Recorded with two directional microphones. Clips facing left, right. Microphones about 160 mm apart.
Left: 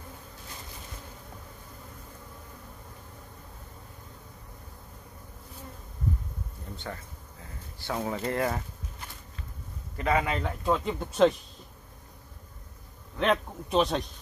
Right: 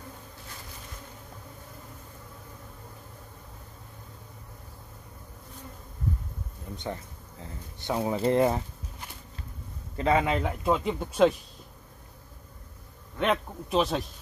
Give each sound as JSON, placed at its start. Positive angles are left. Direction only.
{"t": 6.8, "sound": "speech", "side_deg": -20}
{"t": 9.9, "sound": "speech", "side_deg": -25}
{"t": 10.3, "sound": "speech", "side_deg": -10}
{"t": 13.2, "sound": "a man's voice", "side_deg": 0}